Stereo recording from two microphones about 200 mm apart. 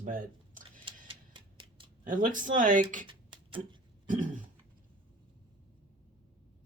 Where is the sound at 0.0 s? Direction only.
40° right (ahead or behind).